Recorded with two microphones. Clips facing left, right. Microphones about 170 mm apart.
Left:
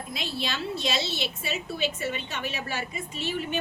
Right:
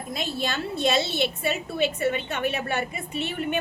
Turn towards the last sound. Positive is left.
turn(degrees=-60)  # may be behind; listen again after turning